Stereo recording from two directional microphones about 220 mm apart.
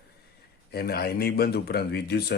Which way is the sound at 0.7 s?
45° left (ahead or behind).